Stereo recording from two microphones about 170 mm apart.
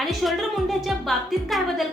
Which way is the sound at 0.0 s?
Centre (ahead or behind).